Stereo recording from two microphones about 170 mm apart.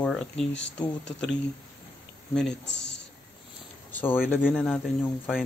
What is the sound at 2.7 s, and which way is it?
Speech, 90° left.